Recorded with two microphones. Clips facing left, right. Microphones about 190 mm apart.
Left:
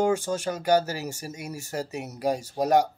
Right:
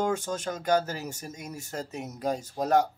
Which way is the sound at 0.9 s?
75° left (ahead or behind).